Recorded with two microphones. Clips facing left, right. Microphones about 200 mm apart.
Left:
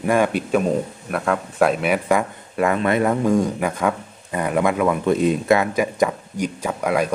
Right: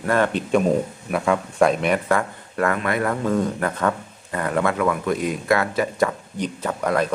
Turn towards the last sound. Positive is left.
turn(degrees=10)  # may be behind; listen again after turning